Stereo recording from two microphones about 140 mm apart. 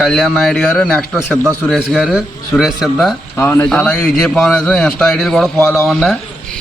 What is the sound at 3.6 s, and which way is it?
A man's voice, 5° left (ahead or behind).